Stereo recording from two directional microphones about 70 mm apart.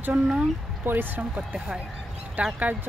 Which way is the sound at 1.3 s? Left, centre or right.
Centre.